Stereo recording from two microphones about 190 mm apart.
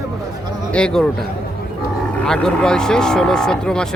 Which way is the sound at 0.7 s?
5° left (ahead or behind).